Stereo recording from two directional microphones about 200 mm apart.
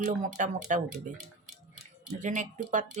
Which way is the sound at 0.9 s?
Centre (ahead or behind).